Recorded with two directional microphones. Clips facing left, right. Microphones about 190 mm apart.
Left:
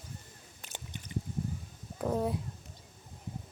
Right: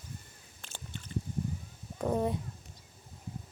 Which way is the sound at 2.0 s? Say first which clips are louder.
Right 1 dB; centre (ahead or behind).